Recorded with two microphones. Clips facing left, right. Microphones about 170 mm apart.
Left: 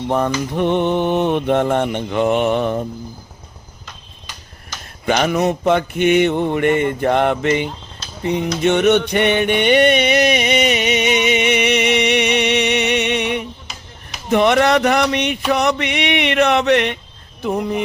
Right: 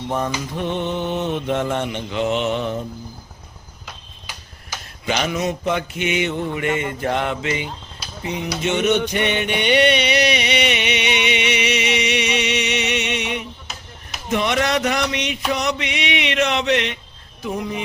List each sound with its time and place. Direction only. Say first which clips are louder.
0.5 s mantra: left 9 dB; 60° left (ahead or behind)
3.8 s a sound: right 2 dB; 5° right (ahead or behind)
5.0 s mantra: left 6 dB; 55° left (ahead or behind)
8.6 s music: left 5 dB; 60° left (ahead or behind)
14.3 s mantra: left 7 dB; 55° left (ahead or behind)